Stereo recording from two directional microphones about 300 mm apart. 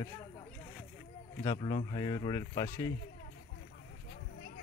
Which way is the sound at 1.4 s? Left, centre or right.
Centre.